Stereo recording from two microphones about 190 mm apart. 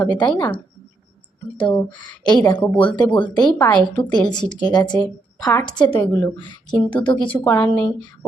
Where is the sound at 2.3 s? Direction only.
20° left (ahead or behind).